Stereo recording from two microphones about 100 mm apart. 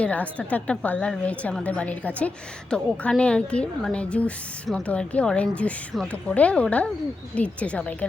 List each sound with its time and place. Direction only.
0.0 s speech: 15° left (ahead or behind)